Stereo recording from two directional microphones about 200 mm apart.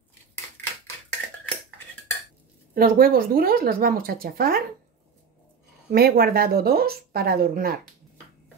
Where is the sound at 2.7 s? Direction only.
45° right (ahead or behind).